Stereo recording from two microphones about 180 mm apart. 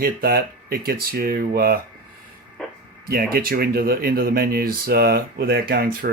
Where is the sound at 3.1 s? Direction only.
55° right (ahead or behind).